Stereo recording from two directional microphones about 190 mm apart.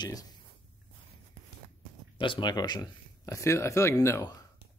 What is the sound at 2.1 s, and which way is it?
Speech, 25° left (ahead or behind).